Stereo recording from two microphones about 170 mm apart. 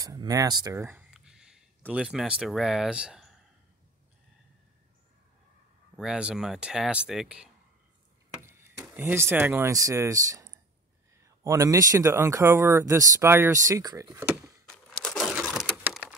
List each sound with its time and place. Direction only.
0.0 s speech: 20° right (ahead or behind)
1.1 s a sound: 5° right (ahead or behind)
5.9 s speech: 5° right (ahead or behind)
8.4 s speech: 15° right (ahead or behind)
14.7 s a sound: 5° left (ahead or behind)
15.9 s typewriter: centre (ahead or behind)